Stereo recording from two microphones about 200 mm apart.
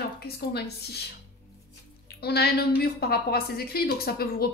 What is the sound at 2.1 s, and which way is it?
A woman's voice, 55° left (ahead or behind).